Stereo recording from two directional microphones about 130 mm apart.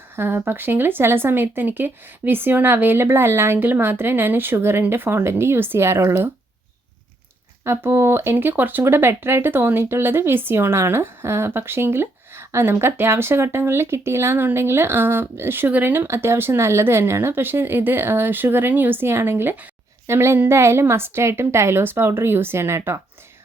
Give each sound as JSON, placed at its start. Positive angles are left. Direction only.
{"t": 0.2, "sound": "speech", "side_deg": -15}
{"t": 7.6, "sound": "a woman's voice", "side_deg": -20}